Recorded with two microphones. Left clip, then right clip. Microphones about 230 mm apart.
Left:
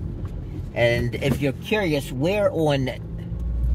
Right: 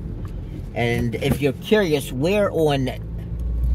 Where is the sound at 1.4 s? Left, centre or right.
Right.